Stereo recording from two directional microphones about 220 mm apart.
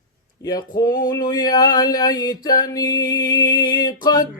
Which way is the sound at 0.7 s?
20° left (ahead or behind).